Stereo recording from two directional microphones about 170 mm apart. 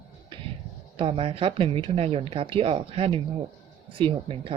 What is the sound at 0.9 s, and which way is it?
Speech, 30° right (ahead or behind).